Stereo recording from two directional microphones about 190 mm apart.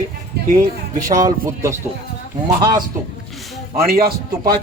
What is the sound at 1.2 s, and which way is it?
Speech, 15° right (ahead or behind).